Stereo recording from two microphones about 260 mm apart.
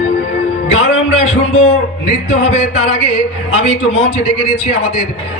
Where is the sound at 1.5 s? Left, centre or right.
Left.